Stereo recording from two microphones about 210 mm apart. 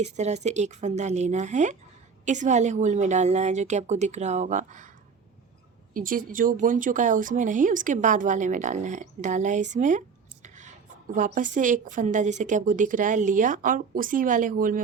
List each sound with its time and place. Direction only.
0.0 s speech: 35° right (ahead or behind)
5.9 s speech: 40° right (ahead or behind)
11.1 s speech: 40° right (ahead or behind)